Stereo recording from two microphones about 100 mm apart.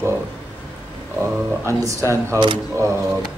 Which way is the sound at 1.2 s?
30° right (ahead or behind).